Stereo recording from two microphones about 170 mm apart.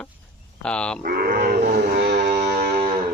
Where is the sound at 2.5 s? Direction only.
65° right (ahead or behind).